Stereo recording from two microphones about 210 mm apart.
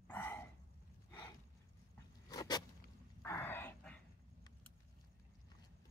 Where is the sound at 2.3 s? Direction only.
20° left (ahead or behind).